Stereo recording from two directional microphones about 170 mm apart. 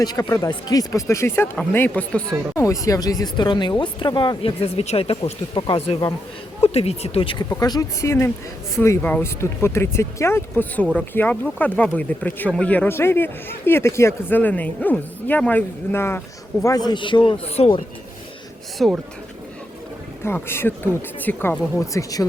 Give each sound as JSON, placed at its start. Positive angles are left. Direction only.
{"t": 0.0, "sound": "speech", "side_deg": 20}
{"t": 2.6, "sound": "speech", "side_deg": 20}
{"t": 7.5, "sound": "speech", "side_deg": 20}
{"t": 18.8, "sound": "speech", "side_deg": 0}
{"t": 20.2, "sound": "speech", "side_deg": 15}